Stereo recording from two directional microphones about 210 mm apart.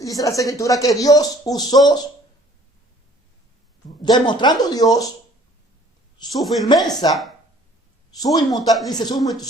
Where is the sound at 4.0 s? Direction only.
20° left (ahead or behind).